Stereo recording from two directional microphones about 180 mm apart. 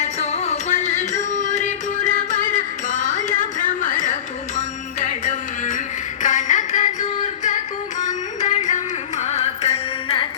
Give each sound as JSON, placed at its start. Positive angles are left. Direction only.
{"t": 0.0, "sound": "music", "side_deg": 40}